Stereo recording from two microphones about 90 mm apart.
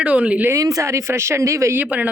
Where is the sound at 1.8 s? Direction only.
15° right (ahead or behind).